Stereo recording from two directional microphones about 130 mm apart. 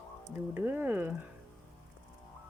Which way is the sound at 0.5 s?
15° right (ahead or behind).